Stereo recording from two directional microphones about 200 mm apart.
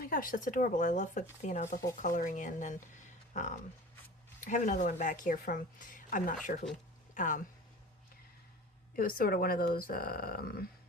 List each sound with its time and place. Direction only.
0.0 s speech: 45° left (ahead or behind)
9.0 s speech: 45° left (ahead or behind)